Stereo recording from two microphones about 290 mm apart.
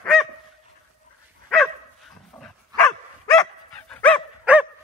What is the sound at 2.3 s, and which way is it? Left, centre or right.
Dog, centre.